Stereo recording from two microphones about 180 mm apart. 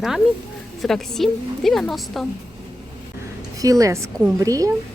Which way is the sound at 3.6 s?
20° right (ahead or behind).